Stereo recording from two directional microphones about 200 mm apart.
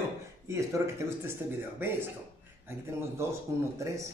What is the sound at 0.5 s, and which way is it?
Speech, 15° right (ahead or behind).